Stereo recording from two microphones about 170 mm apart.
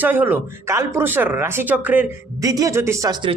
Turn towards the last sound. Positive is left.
turn(degrees=-25)  # may be behind; listen again after turning